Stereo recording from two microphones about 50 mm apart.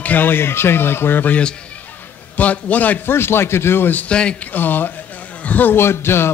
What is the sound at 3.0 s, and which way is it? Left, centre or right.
Speech, left.